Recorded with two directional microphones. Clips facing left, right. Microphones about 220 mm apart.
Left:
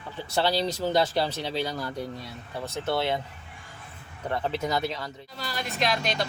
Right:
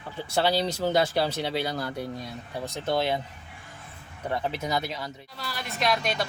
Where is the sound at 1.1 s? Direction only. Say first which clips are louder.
Right 1 dB; 10° right (ahead or behind).